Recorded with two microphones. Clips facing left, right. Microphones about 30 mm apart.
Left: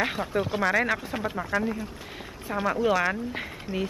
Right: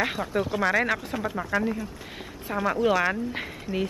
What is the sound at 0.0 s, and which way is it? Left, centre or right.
Speech, centre.